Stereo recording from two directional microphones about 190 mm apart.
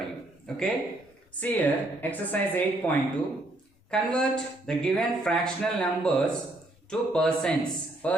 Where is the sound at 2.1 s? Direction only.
10° left (ahead or behind).